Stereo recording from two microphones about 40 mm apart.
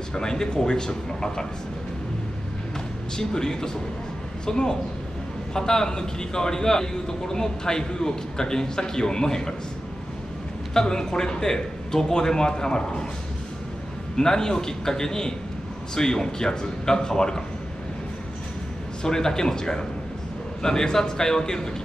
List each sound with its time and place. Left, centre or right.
0.1 s a man's voice: centre
3.2 s a man's voice: centre
10.7 s a man's voice: centre
14.1 s a man's voice: centre
19.0 s a man's voice: centre